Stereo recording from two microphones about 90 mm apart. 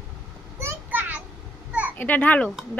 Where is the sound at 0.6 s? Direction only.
20° right (ahead or behind).